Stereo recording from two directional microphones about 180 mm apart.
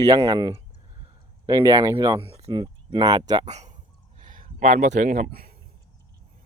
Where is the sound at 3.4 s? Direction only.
40° right (ahead or behind).